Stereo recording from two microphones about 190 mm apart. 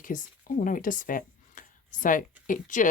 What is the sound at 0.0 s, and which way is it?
Speech, 45° left (ahead or behind).